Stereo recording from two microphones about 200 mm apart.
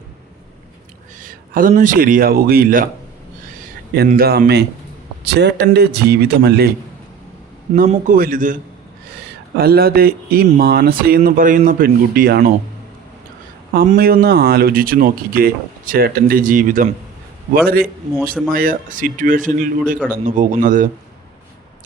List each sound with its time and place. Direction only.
1.2 s speech: 45° right (ahead or behind)
4.1 s speech: 50° right (ahead or behind)
7.8 s speech: 40° right (ahead or behind)
13.7 s speech: 50° right (ahead or behind)